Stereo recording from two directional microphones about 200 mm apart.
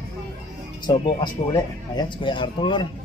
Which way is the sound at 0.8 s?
20° left (ahead or behind).